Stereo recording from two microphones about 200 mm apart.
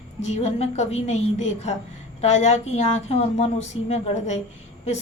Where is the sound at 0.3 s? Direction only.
35° left (ahead or behind).